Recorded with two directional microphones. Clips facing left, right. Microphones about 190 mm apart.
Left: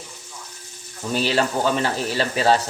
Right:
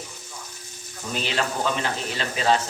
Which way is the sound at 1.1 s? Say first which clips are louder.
Left 6 dB; 35° left (ahead or behind).